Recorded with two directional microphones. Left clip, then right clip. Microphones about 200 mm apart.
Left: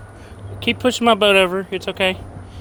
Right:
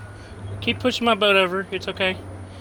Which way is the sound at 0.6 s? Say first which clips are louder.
Left 4 dB; 30° left (ahead or behind).